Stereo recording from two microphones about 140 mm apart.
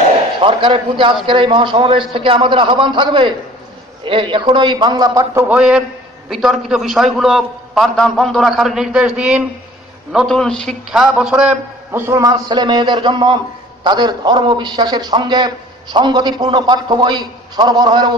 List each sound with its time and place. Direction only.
0.4 s a man's voice: 40° right (ahead or behind)
5.5 s a man's voice: 5° right (ahead or behind)
10.1 s a man's voice: 5° left (ahead or behind); by 18.1 s 30° right (ahead or behind)